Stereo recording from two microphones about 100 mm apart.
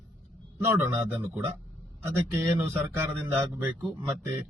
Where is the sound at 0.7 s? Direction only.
10° right (ahead or behind).